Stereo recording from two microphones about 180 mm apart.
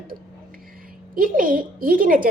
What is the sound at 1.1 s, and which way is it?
A woman's voice, 50° right (ahead or behind).